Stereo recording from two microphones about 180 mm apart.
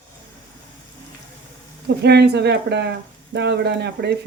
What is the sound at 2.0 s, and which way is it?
Speech, 65° right (ahead or behind).